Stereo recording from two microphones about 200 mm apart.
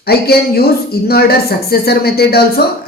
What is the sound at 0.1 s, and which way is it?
Speech, 50° left (ahead or behind).